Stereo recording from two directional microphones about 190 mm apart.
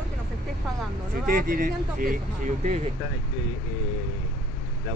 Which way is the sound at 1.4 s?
45° right (ahead or behind).